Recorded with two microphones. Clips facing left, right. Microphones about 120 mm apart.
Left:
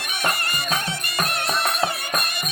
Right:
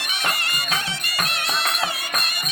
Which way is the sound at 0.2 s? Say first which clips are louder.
Left 3 dB; 50° left (ahead or behind).